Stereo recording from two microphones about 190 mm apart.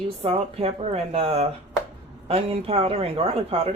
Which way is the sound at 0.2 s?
30° right (ahead or behind).